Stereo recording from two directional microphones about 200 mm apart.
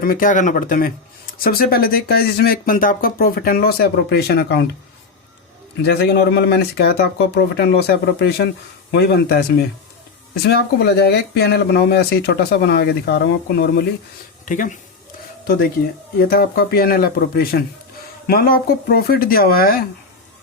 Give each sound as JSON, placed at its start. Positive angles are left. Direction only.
{"t": 0.0, "sound": "speech", "side_deg": 45}
{"t": 5.8, "sound": "speech", "side_deg": 55}
{"t": 11.0, "sound": "speech", "side_deg": 55}
{"t": 14.4, "sound": "speech", "side_deg": 40}
{"t": 16.3, "sound": "speech", "side_deg": 50}